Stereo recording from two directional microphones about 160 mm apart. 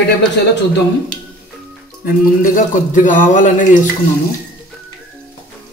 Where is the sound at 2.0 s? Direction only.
60° left (ahead or behind).